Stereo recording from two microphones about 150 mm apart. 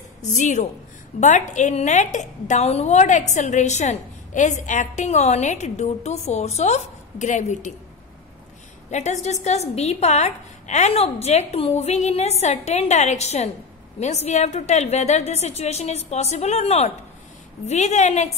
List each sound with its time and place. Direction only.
0.3 s a woman's voice: 55° left (ahead or behind)
8.9 s a woman's voice: 50° left (ahead or behind)